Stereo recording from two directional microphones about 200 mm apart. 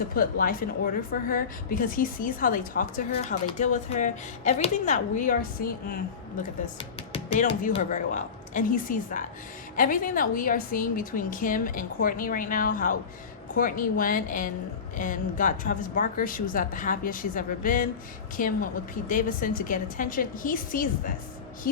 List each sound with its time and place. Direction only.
0.1 s a woman's voice: 45° left (ahead or behind)
6.7 s music: 30° left (ahead or behind)
7.8 s a woman's voice: 40° left (ahead or behind)